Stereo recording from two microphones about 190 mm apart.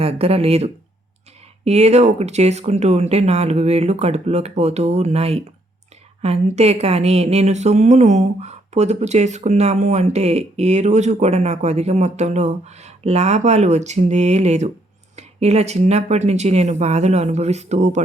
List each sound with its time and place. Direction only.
0.0 s a woman's voice: 30° right (ahead or behind)